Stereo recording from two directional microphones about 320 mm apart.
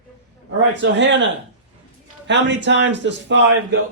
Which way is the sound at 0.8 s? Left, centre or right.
Right.